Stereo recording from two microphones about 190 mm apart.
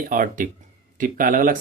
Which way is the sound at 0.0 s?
45° right (ahead or behind).